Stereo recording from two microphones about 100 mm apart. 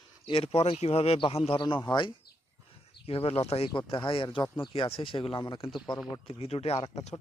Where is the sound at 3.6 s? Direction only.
55° left (ahead or behind).